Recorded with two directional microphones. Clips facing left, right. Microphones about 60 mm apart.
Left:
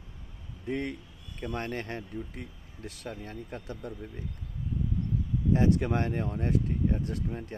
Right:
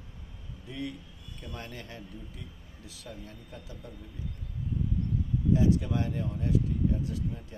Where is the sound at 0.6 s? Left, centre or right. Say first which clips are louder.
Left 5 dB; left.